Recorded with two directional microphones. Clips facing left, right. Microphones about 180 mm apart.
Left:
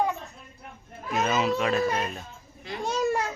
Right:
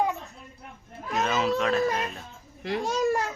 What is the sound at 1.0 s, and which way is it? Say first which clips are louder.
A child's voice: left 1 dB; centre (ahead or behind).